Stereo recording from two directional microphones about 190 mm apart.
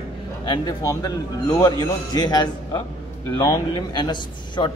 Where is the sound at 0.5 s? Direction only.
20° left (ahead or behind).